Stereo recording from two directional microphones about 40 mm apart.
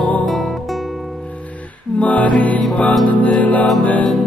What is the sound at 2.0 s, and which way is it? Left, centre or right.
Music, left.